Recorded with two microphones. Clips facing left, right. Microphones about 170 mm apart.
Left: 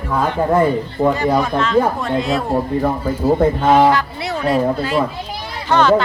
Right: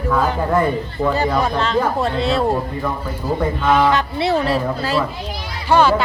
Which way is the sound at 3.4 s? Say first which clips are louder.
Left 2 dB; 40° left (ahead or behind).